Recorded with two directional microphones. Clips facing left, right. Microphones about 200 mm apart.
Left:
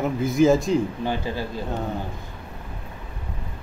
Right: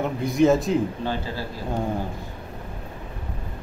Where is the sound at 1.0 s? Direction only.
15° left (ahead or behind).